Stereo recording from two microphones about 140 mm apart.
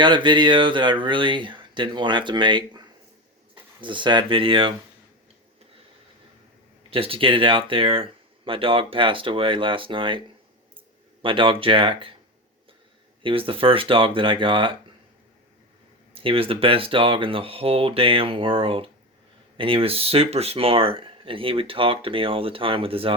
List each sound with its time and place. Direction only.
0.0 s speech: 35° right (ahead or behind)
6.9 s speech: 40° right (ahead or behind)
13.2 s speech: 40° right (ahead or behind)
16.1 s speech: 40° right (ahead or behind)